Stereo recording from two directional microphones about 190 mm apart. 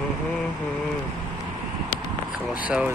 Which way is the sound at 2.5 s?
5° right (ahead or behind).